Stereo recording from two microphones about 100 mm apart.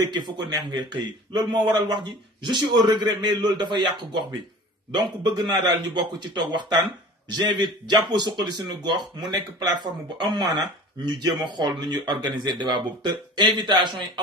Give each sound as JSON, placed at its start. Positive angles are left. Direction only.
{"t": 0.0, "sound": "speech", "side_deg": -45}